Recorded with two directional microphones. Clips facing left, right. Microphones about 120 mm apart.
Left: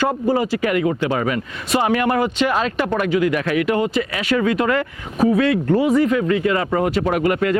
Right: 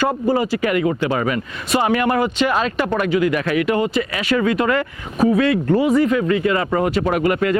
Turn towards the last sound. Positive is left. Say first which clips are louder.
# even
turn(degrees=-15)  # may be behind; listen again after turning